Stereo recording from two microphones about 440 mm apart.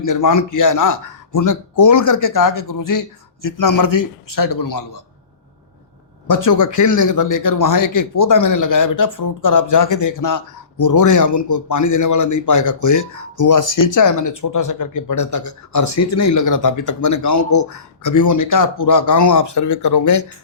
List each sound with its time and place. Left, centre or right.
0.0 s speech: left
6.2 s speech: left